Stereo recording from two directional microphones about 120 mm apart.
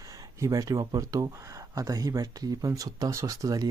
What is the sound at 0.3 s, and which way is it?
Speech, 25° right (ahead or behind).